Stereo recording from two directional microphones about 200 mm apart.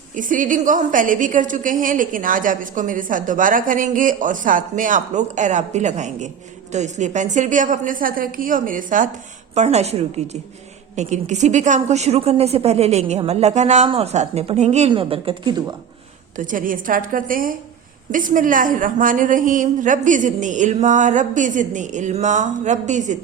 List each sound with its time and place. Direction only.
0.1 s a woman's voice: 40° right (ahead or behind); by 15.7 s 20° right (ahead or behind)
16.4 s a woman's voice: 40° right (ahead or behind)